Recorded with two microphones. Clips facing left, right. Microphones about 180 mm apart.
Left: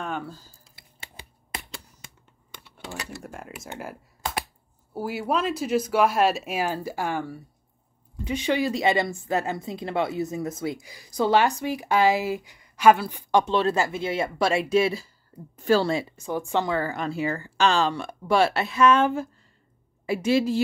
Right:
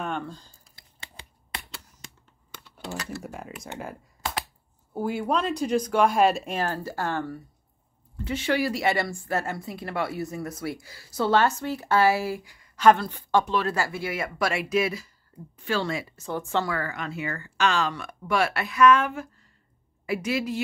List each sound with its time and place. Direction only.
0.0 s a sound: 5° left (ahead or behind)
3.1 s speech: centre (ahead or behind); by 12.8 s 20° left (ahead or behind)
12.8 s a woman's voice: 10° left (ahead or behind)
13.5 s speech: 25° left (ahead or behind)
15.5 s a woman's voice: 40° left (ahead or behind)
16.2 s speech: 15° left (ahead or behind); by 20.6 s 30° left (ahead or behind)